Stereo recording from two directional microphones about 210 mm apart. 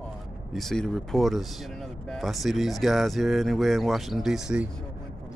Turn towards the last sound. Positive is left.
turn(degrees=-5)  # may be behind; listen again after turning